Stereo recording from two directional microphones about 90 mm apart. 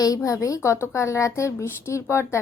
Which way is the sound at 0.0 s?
40° left (ahead or behind).